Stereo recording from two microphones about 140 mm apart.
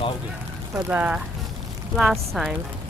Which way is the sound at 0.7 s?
10° right (ahead or behind).